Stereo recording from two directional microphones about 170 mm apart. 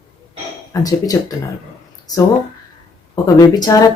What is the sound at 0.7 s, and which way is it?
Speech, 20° left (ahead or behind).